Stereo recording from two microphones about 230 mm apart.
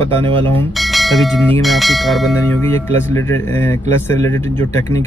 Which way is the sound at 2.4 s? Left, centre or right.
Centre.